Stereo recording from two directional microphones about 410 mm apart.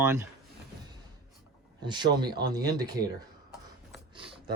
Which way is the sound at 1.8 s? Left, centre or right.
Centre.